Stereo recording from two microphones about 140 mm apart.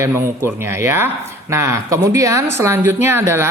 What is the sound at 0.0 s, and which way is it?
A woman's voice, 15° right (ahead or behind).